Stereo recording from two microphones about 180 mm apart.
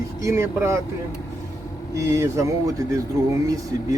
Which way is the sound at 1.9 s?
15° right (ahead or behind).